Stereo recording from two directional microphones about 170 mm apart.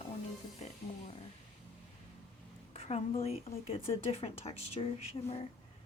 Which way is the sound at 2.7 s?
35° left (ahead or behind).